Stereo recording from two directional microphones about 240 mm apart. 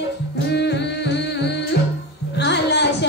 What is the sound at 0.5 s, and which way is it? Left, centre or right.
Music, left.